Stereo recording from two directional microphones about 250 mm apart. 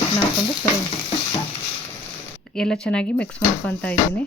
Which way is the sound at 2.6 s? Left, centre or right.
Centre.